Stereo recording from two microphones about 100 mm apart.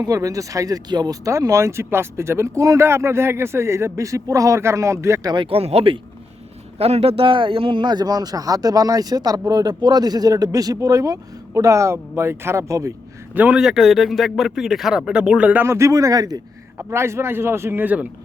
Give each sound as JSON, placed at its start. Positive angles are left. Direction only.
{"t": 0.0, "sound": "speech", "side_deg": -35}
{"t": 5.2, "sound": "speech", "side_deg": -50}
{"t": 5.5, "sound": "speech", "side_deg": -80}
{"t": 6.7, "sound": "speech", "side_deg": -90}
{"t": 13.3, "sound": "a man's voice", "side_deg": -15}
{"t": 13.6, "sound": "speech", "side_deg": 0}
{"t": 15.6, "sound": "speech", "side_deg": -30}
{"t": 16.7, "sound": "a man's voice", "side_deg": -25}